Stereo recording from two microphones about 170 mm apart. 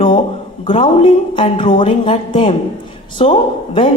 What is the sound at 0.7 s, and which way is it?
A woman's voice, 30° left (ahead or behind).